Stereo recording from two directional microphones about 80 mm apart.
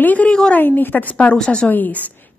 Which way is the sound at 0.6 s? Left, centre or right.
Left.